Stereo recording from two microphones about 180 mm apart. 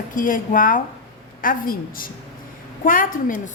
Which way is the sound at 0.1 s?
50° left (ahead or behind).